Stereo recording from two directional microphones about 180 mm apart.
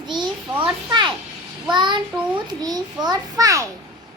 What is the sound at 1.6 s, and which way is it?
Speech, 25° right (ahead or behind).